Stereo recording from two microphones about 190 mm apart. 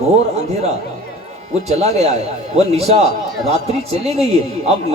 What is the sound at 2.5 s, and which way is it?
Speech, 35° right (ahead or behind).